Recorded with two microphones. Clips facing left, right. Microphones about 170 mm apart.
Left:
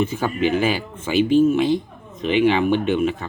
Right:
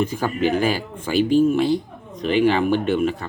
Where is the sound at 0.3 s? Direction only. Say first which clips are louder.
Even; 40° right (ahead or behind).